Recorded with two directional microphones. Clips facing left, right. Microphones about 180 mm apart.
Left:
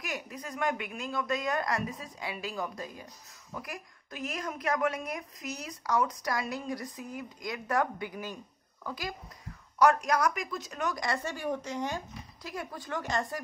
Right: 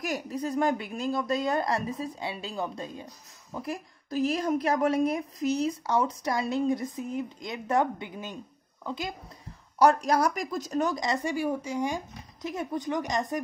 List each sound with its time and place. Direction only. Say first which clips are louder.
0.0 s a woman's voice: right 8 dB; 35° right (ahead or behind); by 13.4 s 20° right (ahead or behind)